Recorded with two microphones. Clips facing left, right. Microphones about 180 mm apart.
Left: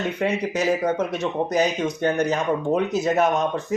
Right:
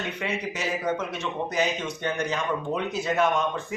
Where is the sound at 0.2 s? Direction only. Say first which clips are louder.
Left 8 dB; 40° left (ahead or behind).